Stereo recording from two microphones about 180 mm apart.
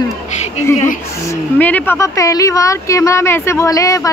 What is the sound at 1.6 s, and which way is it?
Speech, 10° left (ahead or behind).